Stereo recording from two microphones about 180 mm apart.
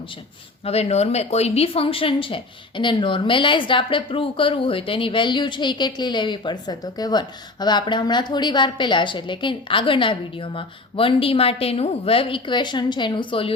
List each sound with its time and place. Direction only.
0.6 s a woman's voice: 35° left (ahead or behind)